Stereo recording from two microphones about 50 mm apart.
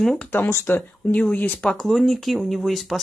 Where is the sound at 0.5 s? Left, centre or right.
Left.